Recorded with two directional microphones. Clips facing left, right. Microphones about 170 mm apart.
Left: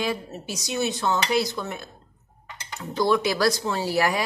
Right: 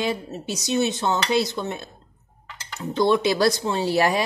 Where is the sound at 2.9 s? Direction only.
25° right (ahead or behind).